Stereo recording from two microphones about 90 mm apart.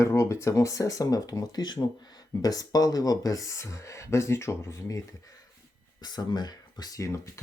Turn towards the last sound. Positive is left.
turn(degrees=35)  # may be behind; listen again after turning